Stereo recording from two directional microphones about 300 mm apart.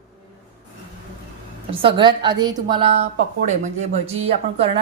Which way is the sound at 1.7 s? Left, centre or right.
Centre.